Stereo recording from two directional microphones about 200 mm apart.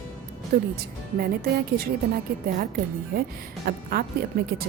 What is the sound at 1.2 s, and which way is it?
A woman's voice, 50° right (ahead or behind).